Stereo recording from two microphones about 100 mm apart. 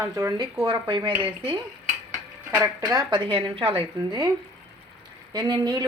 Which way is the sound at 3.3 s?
60° right (ahead or behind).